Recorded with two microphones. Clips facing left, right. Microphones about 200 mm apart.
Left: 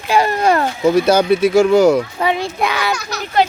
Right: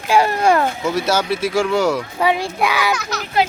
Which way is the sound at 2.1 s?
10° right (ahead or behind).